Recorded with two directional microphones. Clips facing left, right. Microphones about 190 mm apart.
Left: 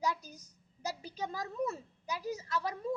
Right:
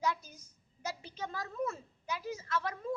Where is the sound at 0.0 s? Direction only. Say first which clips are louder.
Even; 35° left (ahead or behind).